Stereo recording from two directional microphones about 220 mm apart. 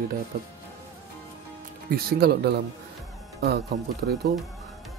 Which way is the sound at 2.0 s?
45° right (ahead or behind).